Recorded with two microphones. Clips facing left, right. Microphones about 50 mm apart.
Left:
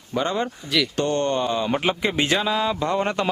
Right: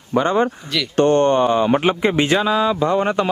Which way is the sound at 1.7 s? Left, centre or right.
Right.